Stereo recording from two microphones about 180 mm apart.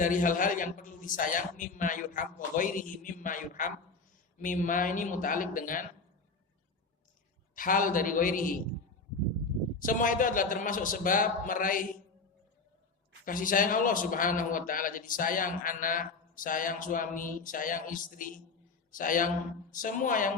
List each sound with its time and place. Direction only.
0.0 s a man's voice: 50° left (ahead or behind)
7.5 s a man's voice: 50° left (ahead or behind)
9.7 s a man's voice: 50° left (ahead or behind)
13.2 s a man's voice: 50° left (ahead or behind)